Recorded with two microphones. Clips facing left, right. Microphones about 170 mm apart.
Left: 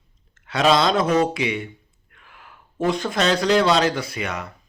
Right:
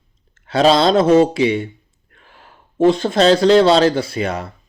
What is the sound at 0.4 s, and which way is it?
Speech, 30° right (ahead or behind).